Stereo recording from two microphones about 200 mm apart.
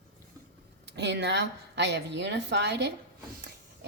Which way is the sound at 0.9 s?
55° right (ahead or behind).